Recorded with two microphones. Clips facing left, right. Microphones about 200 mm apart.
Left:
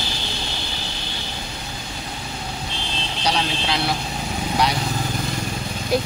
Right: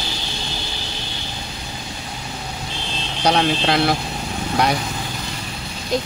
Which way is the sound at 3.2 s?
55° right (ahead or behind).